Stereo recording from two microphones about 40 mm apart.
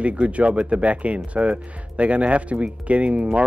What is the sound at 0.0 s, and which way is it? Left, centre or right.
Speech, right.